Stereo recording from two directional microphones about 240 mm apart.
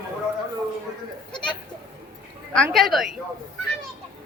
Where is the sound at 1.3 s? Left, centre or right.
Centre.